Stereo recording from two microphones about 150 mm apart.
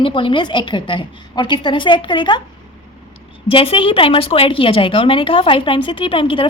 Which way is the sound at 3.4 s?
40° left (ahead or behind).